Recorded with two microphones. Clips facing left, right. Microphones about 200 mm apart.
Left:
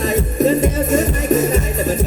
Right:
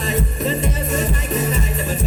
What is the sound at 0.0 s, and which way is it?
Music, 45° left (ahead or behind).